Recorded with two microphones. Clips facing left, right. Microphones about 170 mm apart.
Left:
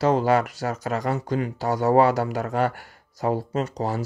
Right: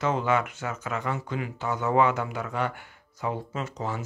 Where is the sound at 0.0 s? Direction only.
35° left (ahead or behind).